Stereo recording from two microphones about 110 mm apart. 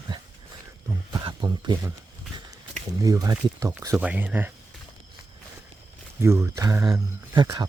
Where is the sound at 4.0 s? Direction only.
10° right (ahead or behind).